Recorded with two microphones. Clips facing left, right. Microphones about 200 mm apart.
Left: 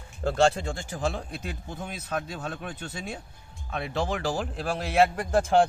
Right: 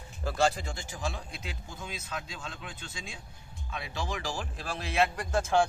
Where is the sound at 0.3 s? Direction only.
60° left (ahead or behind).